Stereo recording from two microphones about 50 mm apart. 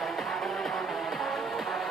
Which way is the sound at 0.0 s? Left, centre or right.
Centre.